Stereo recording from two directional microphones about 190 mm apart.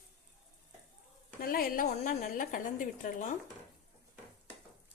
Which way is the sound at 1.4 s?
50° left (ahead or behind).